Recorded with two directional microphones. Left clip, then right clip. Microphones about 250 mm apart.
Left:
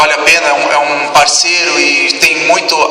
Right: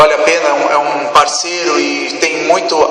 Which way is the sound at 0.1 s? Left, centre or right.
Left.